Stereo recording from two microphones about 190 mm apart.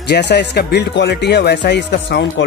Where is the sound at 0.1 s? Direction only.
60° left (ahead or behind).